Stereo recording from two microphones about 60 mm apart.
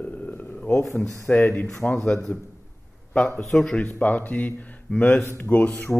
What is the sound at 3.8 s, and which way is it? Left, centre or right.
Speech, left.